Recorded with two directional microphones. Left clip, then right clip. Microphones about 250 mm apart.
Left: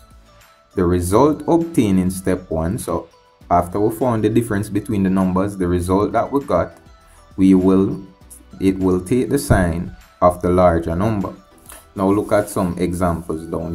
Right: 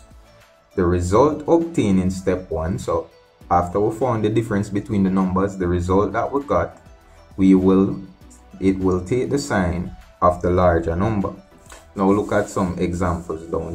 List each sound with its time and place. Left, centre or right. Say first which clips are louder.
0.7 s speech: left 1 dB; left